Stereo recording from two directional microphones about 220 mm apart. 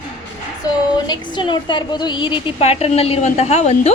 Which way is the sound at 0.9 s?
20° left (ahead or behind).